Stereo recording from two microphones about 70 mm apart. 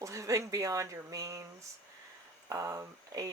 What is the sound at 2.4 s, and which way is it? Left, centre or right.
Speech, right.